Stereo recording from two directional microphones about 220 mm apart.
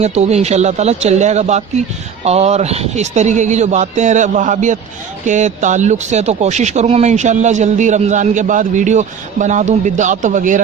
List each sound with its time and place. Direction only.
0.0 s a man's voice: 30° right (ahead or behind)